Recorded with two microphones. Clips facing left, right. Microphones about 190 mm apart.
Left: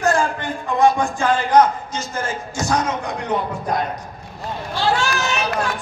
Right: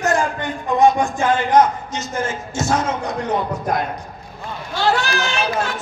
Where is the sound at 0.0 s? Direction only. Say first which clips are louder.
Even; 20° right (ahead or behind).